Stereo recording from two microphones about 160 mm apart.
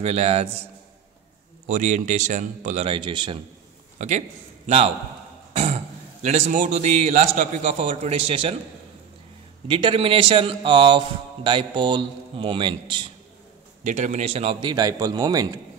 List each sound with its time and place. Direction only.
0.0 s a man's voice: 40° right (ahead or behind)
1.7 s a man's voice: 50° right (ahead or behind); by 3.4 s 30° right (ahead or behind)
4.0 s a man's voice: 50° right (ahead or behind)
6.2 s a man's voice: 45° right (ahead or behind)
9.7 s a man's voice: 35° right (ahead or behind)
13.8 s a man's voice: 45° right (ahead or behind); by 15.6 s 25° right (ahead or behind)